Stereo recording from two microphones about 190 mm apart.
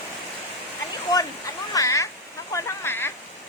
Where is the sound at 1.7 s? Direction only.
15° left (ahead or behind).